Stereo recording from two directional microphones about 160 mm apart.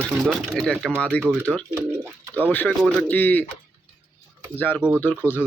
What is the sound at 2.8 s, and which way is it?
Speech, 5° left (ahead or behind).